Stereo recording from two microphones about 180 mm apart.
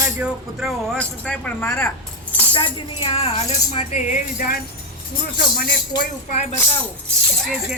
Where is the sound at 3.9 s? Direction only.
45° left (ahead or behind).